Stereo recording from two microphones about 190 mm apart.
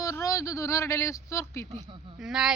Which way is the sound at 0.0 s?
15° left (ahead or behind).